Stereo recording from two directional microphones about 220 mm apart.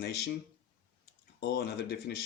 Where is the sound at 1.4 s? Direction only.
50° left (ahead or behind).